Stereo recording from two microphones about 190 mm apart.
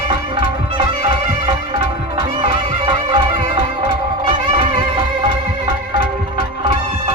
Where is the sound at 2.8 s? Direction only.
25° right (ahead or behind).